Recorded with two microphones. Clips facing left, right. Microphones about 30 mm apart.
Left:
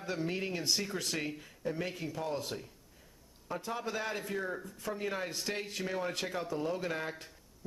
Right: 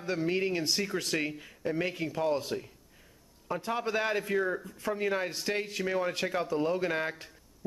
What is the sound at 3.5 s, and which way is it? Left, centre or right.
Speech, right.